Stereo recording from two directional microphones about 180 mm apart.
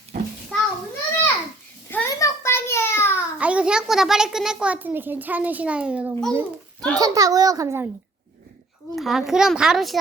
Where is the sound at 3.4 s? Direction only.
5° right (ahead or behind).